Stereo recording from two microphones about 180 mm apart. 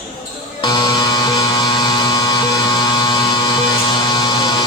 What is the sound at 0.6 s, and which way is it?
Music, 25° left (ahead or behind).